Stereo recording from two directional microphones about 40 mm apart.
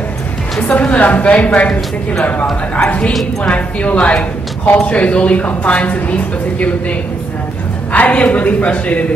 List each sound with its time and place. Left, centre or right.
0.7 s speech: left
3.4 s speech: left